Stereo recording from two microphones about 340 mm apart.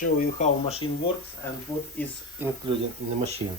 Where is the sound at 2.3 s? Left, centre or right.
Centre.